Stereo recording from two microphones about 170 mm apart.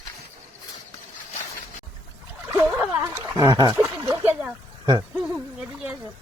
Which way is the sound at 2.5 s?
15° right (ahead or behind).